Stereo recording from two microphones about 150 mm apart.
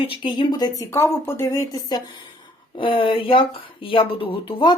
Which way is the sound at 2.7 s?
35° left (ahead or behind).